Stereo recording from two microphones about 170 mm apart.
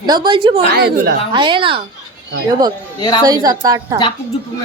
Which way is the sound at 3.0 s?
25° left (ahead or behind).